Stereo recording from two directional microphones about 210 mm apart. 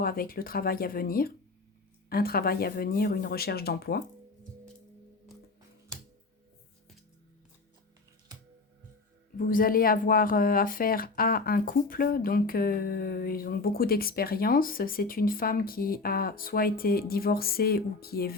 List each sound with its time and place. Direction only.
0.0 s speech: 45° left (ahead or behind)
9.4 s speech: 40° left (ahead or behind)